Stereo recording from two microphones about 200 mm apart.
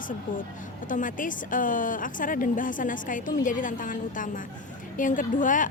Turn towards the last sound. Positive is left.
turn(degrees=40)  # may be behind; listen again after turning